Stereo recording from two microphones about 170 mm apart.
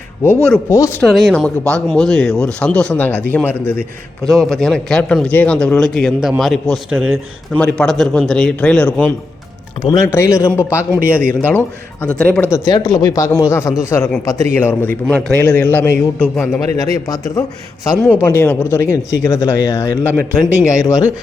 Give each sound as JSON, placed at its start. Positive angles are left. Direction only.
{"t": 0.7, "sound": "speech", "side_deg": 15}
{"t": 1.0, "sound": "speech", "side_deg": 0}
{"t": 9.8, "sound": "speech", "side_deg": 20}
{"t": 10.9, "sound": "a man's voice", "side_deg": -10}
{"t": 11.4, "sound": "speech", "side_deg": 10}
{"t": 16.7, "sound": "speech", "side_deg": 20}